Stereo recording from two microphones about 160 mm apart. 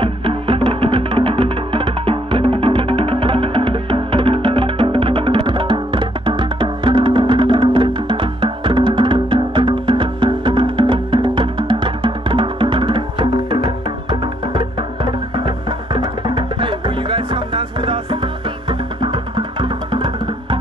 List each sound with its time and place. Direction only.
0.0 s music: 35° right (ahead or behind)